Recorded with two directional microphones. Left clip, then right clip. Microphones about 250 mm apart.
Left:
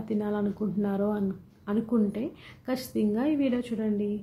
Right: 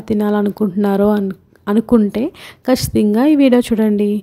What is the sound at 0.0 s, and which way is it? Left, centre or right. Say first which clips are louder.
A woman's voice: right 13 dB; right.